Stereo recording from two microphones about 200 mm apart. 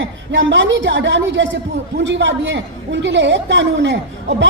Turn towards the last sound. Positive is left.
turn(degrees=-65)  # may be behind; listen again after turning